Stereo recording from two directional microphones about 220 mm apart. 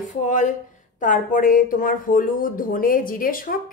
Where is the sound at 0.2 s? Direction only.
35° left (ahead or behind).